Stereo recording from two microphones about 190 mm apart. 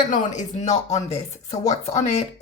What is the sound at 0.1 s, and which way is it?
Speech, 40° left (ahead or behind).